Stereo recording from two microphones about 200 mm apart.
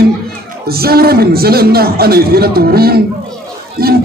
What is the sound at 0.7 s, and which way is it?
A man's voice, 50° right (ahead or behind).